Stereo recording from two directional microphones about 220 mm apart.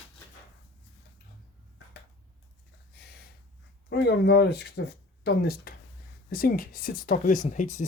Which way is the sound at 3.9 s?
50° left (ahead or behind).